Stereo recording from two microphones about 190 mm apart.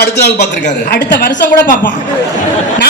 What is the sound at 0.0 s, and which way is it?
A man's voice, 60° left (ahead or behind).